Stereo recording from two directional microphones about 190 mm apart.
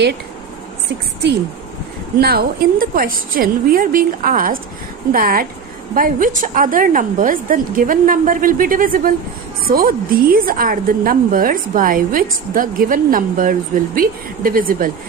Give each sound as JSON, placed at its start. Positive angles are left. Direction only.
{"t": 2.2, "sound": "a woman's voice", "side_deg": -55}